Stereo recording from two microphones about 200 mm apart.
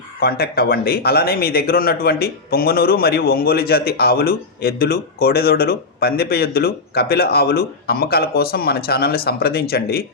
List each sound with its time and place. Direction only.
0.2 s speech: 50° left (ahead or behind)